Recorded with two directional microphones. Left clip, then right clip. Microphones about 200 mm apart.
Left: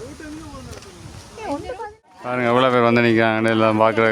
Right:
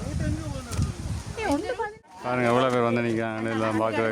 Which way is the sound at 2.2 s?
20° left (ahead or behind).